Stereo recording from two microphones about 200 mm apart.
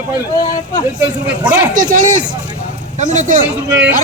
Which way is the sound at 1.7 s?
40° right (ahead or behind).